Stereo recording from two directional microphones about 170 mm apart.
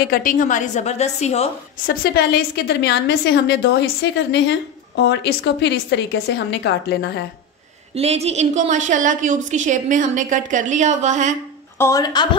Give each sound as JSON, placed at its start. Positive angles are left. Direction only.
{"t": 0.1, "sound": "a woman's voice", "side_deg": 50}
{"t": 1.9, "sound": "a woman's voice", "side_deg": 65}
{"t": 7.9, "sound": "a woman's voice", "side_deg": -40}
{"t": 11.8, "sound": "a woman's voice", "side_deg": 20}